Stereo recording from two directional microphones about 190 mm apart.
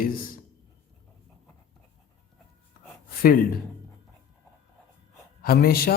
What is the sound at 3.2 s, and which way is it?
Speech, 50° left (ahead or behind).